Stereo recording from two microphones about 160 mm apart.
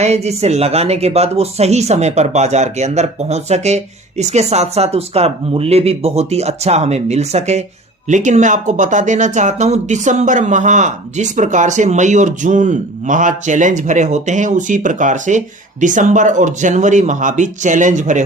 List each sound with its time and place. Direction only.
0.0 s speech: 40° right (ahead or behind)